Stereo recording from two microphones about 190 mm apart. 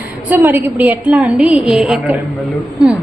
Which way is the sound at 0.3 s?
10° right (ahead or behind).